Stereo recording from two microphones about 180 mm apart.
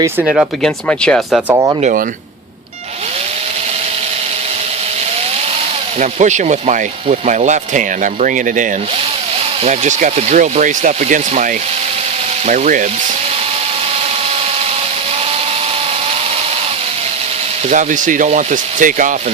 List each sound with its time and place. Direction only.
0.3 s speech: centre (ahead or behind)
1.5 s speech: 20° right (ahead or behind)
1.8 s speech: 50° right (ahead or behind)
6.0 s speech: 40° right (ahead or behind)
9.6 s speech: 40° right (ahead or behind)
12.5 s speech: 45° right (ahead or behind)
17.7 s speech: 45° right (ahead or behind)